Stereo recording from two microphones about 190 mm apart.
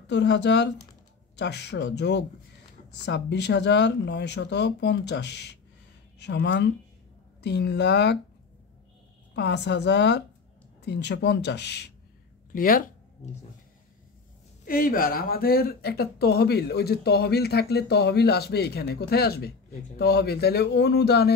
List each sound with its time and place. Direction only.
0.0 s speech: 65° left (ahead or behind)
9.3 s speech: 65° left (ahead or behind)
12.5 s a sound: 50° left (ahead or behind)
14.7 s speech: 50° left (ahead or behind)